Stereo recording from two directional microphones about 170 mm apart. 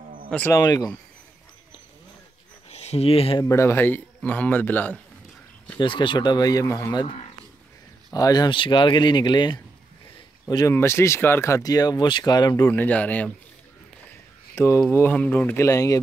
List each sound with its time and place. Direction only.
0.5 s speech: 20° left (ahead or behind)
2.7 s speech: 40° left (ahead or behind)
3.4 s a man's voice: 15° left (ahead or behind)
5.8 s speech: 30° left (ahead or behind)
12.6 s a man's voice: 10° left (ahead or behind)
14.0 s a sound: 15° left (ahead or behind)
14.9 s a man's voice: 10° left (ahead or behind)